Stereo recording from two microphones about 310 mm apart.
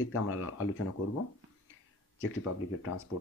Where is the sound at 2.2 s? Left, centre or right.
Left.